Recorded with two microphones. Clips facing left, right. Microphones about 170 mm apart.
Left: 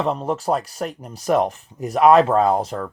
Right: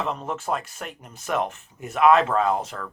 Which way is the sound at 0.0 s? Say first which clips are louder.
Left 6 dB; 35° left (ahead or behind).